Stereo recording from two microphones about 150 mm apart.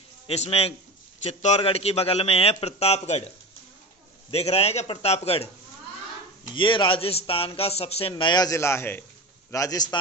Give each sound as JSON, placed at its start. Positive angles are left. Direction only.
{"t": 0.3, "sound": "a man's voice", "side_deg": 45}
{"t": 4.3, "sound": "a man's voice", "side_deg": 45}
{"t": 6.4, "sound": "a man's voice", "side_deg": 35}
{"t": 8.1, "sound": "a man's voice", "side_deg": 30}